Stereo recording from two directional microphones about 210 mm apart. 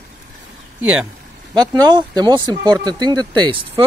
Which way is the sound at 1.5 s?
20° right (ahead or behind).